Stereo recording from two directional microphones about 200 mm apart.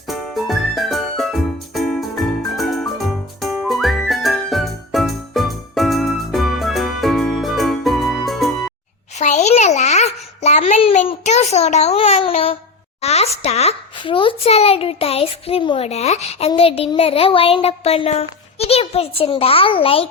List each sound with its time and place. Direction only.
0.1 s music: centre (ahead or behind)
9.1 s a sound: 35° left (ahead or behind)
13.0 s a child's voice: 30° left (ahead or behind)
16.5 s child singing: 30° left (ahead or behind)